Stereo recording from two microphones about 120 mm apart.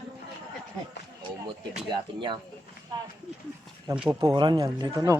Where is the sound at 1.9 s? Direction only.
45° right (ahead or behind).